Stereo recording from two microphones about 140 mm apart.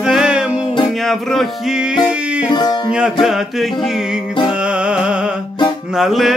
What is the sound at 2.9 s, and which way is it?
Music, 5° right (ahead or behind).